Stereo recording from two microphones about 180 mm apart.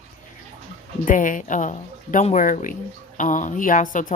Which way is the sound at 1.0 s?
45° left (ahead or behind).